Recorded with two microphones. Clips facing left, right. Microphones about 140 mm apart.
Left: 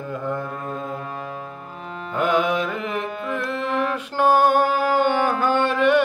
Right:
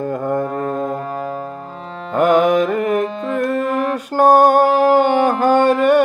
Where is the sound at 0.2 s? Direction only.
50° right (ahead or behind).